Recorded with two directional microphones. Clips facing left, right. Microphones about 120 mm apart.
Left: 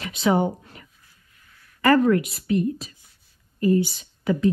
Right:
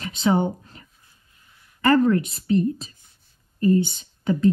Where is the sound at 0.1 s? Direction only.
30° right (ahead or behind).